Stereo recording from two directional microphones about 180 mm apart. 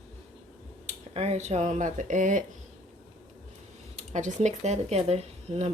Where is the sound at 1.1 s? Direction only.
35° right (ahead or behind).